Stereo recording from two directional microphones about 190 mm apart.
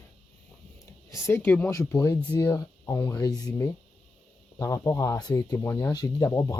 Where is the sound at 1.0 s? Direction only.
15° left (ahead or behind).